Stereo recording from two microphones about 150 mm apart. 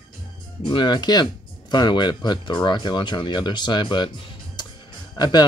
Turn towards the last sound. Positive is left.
turn(degrees=30)  # may be behind; listen again after turning